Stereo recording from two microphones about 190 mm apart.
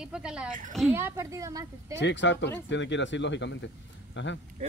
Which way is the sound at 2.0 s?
70° left (ahead or behind).